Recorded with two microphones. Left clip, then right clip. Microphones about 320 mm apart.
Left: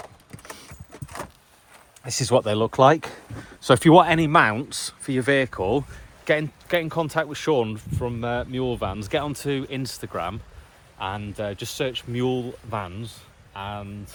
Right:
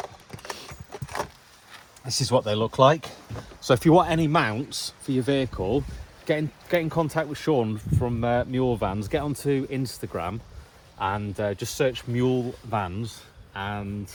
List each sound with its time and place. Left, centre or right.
2.0 s speech: centre
4.7 s speech: centre
5.3 s speech: centre
6.2 s speech: centre